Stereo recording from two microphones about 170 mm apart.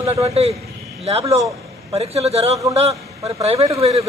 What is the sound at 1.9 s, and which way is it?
Speech, 40° right (ahead or behind).